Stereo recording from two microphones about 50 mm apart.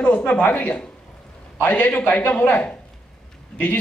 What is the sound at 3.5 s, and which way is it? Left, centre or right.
Speech, centre.